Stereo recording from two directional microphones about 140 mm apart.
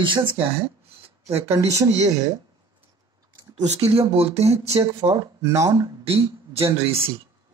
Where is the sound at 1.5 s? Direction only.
20° right (ahead or behind).